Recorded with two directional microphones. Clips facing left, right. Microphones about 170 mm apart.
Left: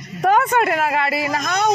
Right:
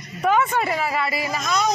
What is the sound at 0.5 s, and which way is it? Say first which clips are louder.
Speech: left 5 dB; 65° left (ahead or behind).